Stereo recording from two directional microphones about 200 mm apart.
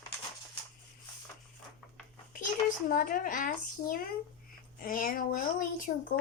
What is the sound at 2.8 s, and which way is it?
Speech, 45° left (ahead or behind).